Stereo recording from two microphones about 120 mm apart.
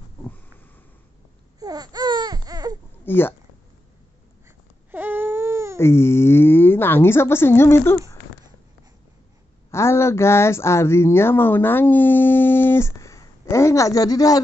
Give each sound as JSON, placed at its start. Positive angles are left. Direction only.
{"t": 1.6, "sound": "baby cry", "side_deg": -30}
{"t": 3.1, "sound": "speech", "side_deg": 20}
{"t": 4.5, "sound": "baby cry", "side_deg": -15}
{"t": 5.8, "sound": "speech", "side_deg": 20}
{"t": 9.7, "sound": "speech", "side_deg": 20}